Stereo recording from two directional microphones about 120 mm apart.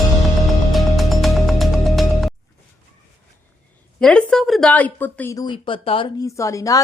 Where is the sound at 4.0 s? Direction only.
5° left (ahead or behind).